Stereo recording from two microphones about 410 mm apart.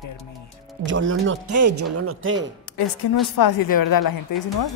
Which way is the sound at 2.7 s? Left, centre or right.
Left.